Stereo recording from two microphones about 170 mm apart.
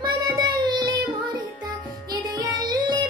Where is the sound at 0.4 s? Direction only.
25° right (ahead or behind).